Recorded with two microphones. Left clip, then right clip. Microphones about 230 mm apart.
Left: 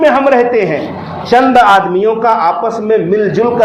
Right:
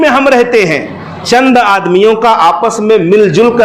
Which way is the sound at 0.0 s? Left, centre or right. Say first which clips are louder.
Right 1 dB; right.